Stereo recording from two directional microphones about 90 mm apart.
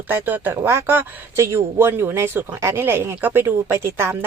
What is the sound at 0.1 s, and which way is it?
Speech, 20° right (ahead or behind).